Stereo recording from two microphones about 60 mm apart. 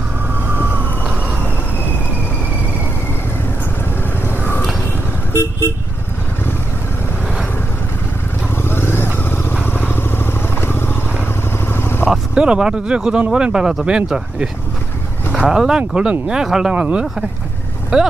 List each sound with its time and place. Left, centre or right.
5.3 s vehicle: left
8.6 s vehicle: left
12.1 s speech: centre
16.7 s speech: right